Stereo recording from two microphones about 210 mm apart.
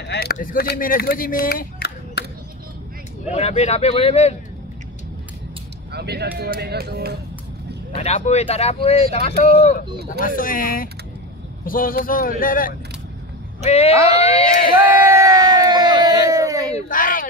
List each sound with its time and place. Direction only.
0.0 s speech: 50° left (ahead or behind)
3.3 s speech: 30° left (ahead or behind)
5.9 s speech: 50° right (ahead or behind)
7.9 s speech: 30° left (ahead or behind)
13.7 s speech: 30° left (ahead or behind)
14.2 s speech: 40° left (ahead or behind)
15.2 s a sound: 20° right (ahead or behind)
16.7 s a sound: 40° left (ahead or behind)